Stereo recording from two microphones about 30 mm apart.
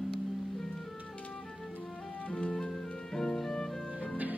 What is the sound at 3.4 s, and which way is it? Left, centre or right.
Music, left.